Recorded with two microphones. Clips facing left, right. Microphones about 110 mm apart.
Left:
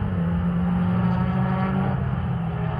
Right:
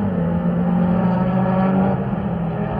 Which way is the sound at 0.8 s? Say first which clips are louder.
Right 6 dB; 50° right (ahead or behind).